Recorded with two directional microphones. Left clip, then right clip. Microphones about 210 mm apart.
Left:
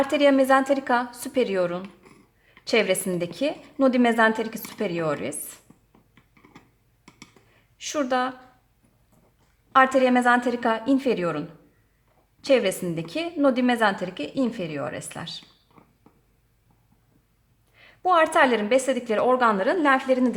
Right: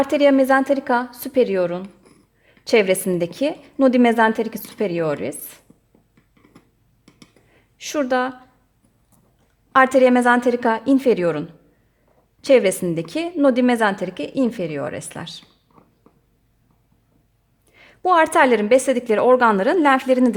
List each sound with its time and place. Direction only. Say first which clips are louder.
0.0 s a woman's voice: right 4 dB; 35° right (ahead or behind)
7.8 s a woman's voice: right 4 dB; 35° right (ahead or behind)
9.7 s a woman's voice: right 5 dB; 40° right (ahead or behind)
17.7 s a woman's voice: right 4 dB; 40° right (ahead or behind)